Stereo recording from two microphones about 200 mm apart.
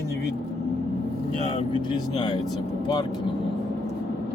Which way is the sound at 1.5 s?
25° left (ahead or behind).